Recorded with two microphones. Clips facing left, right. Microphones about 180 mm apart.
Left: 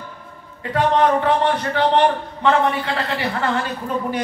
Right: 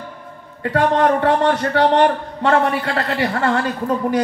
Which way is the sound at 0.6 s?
45° right (ahead or behind).